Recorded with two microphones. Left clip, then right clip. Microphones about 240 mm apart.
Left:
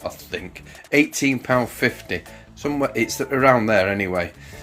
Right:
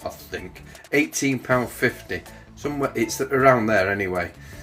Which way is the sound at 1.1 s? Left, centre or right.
Left.